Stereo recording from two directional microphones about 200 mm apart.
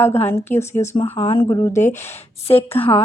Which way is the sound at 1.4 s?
15° left (ahead or behind).